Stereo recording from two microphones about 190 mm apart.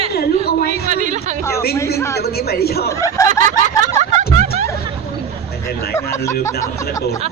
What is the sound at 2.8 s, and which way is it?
Snicker, 15° left (ahead or behind).